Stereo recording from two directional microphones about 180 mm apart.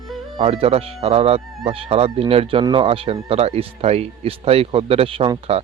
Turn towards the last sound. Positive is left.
turn(degrees=-35)  # may be behind; listen again after turning